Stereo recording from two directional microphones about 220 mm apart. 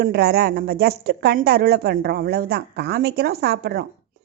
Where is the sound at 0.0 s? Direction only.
45° right (ahead or behind).